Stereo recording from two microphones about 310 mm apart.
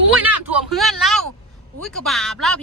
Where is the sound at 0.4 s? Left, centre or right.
Centre.